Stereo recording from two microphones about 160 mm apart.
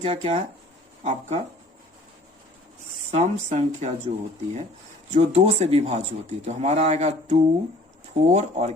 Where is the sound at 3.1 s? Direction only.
45° right (ahead or behind).